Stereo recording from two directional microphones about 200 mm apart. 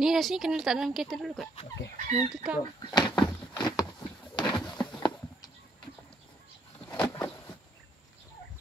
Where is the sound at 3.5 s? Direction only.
20° left (ahead or behind).